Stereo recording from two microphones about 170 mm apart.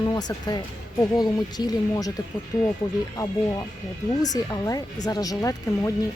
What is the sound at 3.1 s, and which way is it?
Speech, 20° left (ahead or behind).